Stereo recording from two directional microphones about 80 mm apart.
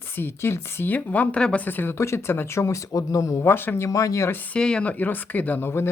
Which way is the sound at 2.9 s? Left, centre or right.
Left.